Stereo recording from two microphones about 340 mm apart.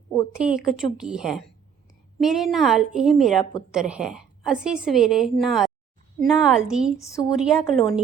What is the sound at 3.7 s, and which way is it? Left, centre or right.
A woman's voice, centre.